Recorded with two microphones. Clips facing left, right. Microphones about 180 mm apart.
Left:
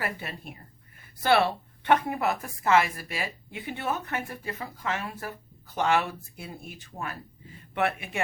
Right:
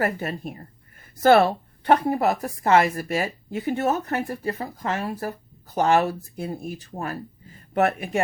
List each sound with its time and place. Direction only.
0.0 s a woman's voice: 45° right (ahead or behind)